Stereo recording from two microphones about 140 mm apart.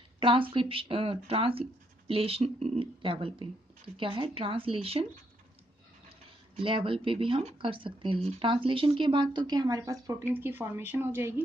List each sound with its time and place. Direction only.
0.2 s speech: 40° right (ahead or behind)
6.6 s speech: 40° right (ahead or behind)
10.3 s speech: 15° right (ahead or behind)